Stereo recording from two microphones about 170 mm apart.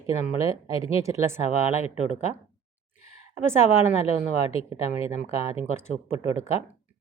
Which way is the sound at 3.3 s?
15° right (ahead or behind).